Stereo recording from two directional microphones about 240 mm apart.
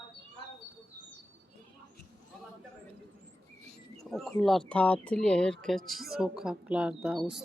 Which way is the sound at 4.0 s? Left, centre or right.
Centre.